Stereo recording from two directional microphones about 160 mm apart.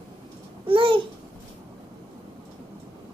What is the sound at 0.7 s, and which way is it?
Babbling, 35° right (ahead or behind).